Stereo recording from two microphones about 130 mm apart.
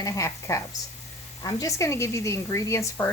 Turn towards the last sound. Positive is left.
turn(degrees=20)  # may be behind; listen again after turning